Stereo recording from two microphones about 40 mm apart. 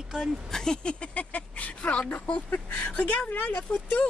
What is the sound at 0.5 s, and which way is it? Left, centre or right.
Speech, centre.